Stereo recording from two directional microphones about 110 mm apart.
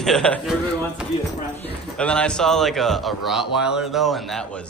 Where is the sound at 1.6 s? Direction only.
10° left (ahead or behind).